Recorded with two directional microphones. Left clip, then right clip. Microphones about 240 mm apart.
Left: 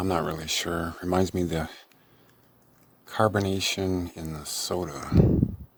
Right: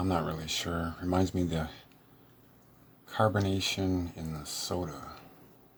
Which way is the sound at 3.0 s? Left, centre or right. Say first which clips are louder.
Left 4 dB; left.